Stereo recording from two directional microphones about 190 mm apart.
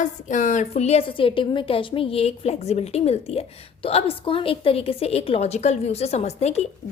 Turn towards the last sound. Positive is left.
turn(degrees=35)  # may be behind; listen again after turning